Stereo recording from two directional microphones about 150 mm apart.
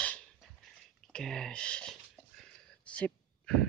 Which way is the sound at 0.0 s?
10° left (ahead or behind).